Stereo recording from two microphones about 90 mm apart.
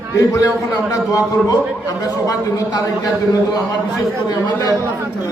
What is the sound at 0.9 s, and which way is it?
A man's voice, 40° left (ahead or behind).